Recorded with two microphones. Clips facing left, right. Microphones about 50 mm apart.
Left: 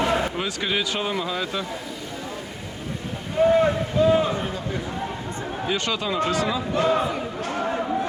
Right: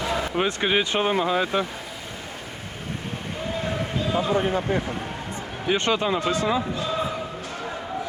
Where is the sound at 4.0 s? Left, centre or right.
Left.